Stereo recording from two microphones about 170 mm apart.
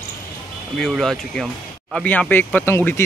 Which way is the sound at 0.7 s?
5° left (ahead or behind).